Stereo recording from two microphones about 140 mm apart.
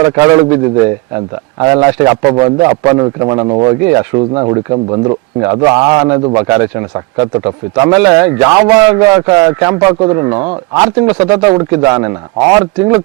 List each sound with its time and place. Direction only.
0.0 s a man's voice: 20° right (ahead or behind)
6.3 s a man's voice: 20° right (ahead or behind)
10.8 s a man's voice: 20° right (ahead or behind)